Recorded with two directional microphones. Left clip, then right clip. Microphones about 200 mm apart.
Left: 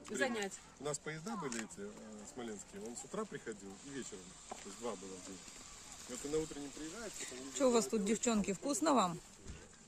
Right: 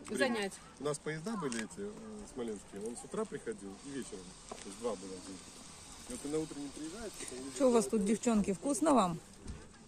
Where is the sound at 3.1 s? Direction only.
65° left (ahead or behind).